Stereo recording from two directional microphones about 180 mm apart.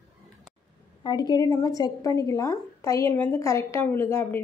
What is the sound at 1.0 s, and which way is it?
A woman's voice, 20° left (ahead or behind).